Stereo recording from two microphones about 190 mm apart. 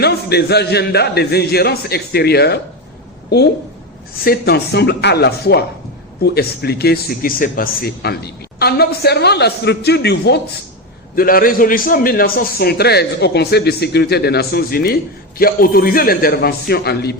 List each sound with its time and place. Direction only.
0.0 s speech: 60° left (ahead or behind)
4.2 s speech: 55° left (ahead or behind)
11.1 s a man's voice: 50° left (ahead or behind)